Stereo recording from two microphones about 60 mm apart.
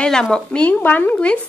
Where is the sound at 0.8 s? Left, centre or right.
Left.